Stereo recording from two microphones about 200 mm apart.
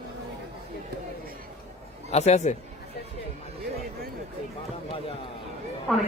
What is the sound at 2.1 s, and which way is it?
Speech, 35° left (ahead or behind).